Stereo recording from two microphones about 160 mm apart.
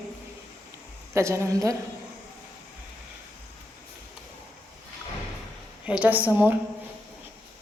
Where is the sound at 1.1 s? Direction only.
15° right (ahead or behind).